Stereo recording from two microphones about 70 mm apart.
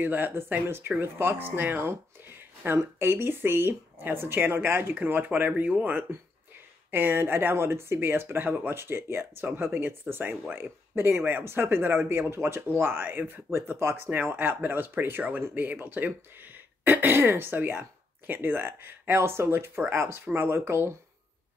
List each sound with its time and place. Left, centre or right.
0.0 s speech: right